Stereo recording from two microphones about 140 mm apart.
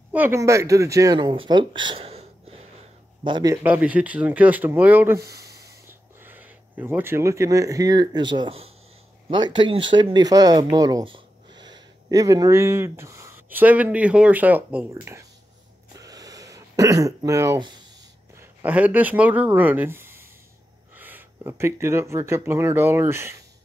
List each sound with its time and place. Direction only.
0.1 s speech: 15° right (ahead or behind); by 2.2 s 45° right (ahead or behind)
3.3 s speech: 35° right (ahead or behind)
3.6 s speech: 10° right (ahead or behind)
16.0 s a sound: 25° right (ahead or behind)
18.3 s speech: 10° right (ahead or behind)